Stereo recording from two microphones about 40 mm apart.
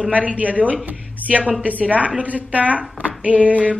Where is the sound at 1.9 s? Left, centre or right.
Right.